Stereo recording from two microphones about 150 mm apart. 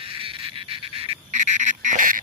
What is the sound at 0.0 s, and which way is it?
Duck, 40° right (ahead or behind).